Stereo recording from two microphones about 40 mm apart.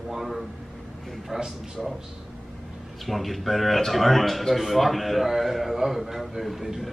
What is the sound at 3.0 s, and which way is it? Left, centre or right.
A man's voice, centre.